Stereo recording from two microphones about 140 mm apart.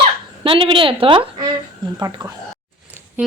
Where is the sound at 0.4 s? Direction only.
40° right (ahead or behind).